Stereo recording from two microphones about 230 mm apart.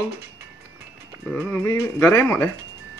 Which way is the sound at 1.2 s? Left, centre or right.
Centre.